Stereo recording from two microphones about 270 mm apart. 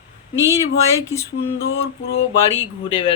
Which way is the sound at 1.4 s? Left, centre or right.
Left.